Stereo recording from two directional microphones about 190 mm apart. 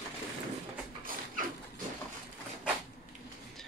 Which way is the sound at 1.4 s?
45° right (ahead or behind).